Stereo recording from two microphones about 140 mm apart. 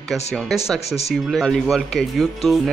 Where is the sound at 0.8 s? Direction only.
50° left (ahead or behind).